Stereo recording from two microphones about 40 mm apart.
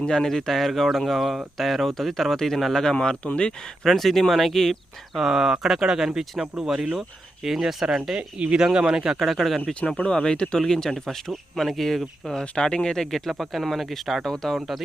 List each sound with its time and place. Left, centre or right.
0.1 s speech: centre
2.9 s speech: left
3.8 s speech: centre
5.2 s speech: centre
7.4 s speech: centre
8.1 s speech: right
9.1 s speech: centre
10.0 s speech: left; by 12.3 s centre
12.3 s speech: centre